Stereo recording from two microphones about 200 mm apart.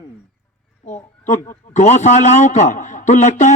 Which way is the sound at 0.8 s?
40° left (ahead or behind).